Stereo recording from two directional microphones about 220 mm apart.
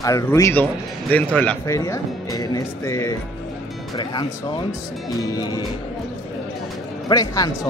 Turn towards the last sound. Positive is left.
turn(degrees=15)  # may be behind; listen again after turning